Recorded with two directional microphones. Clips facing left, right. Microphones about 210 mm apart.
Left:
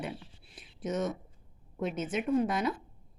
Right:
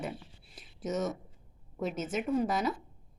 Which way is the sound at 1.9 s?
5° right (ahead or behind).